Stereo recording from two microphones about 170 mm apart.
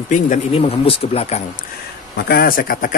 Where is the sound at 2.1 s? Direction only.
65° left (ahead or behind).